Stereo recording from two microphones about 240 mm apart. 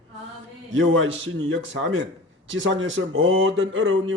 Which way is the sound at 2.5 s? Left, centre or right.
Right.